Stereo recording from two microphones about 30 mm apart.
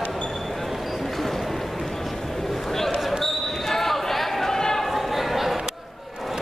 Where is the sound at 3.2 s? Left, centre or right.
Centre.